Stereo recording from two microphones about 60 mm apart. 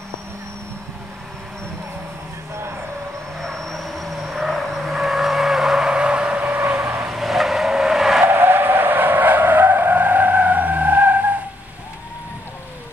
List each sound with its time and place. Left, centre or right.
3.3 s vehicle: centre; by 6.6 s right
6.6 s vehicle: right
7.1 s vehicle: centre
8.3 s vehicle: right